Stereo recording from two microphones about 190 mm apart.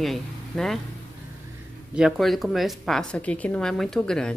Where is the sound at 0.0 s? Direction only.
Centre (ahead or behind).